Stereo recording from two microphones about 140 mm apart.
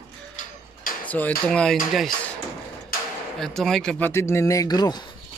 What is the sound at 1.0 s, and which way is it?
Speech, 10° left (ahead or behind).